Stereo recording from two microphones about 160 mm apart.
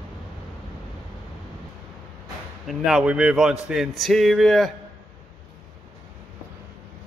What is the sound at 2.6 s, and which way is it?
Speech, 5° right (ahead or behind).